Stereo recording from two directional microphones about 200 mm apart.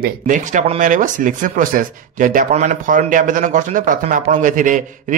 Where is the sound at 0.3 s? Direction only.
40° right (ahead or behind).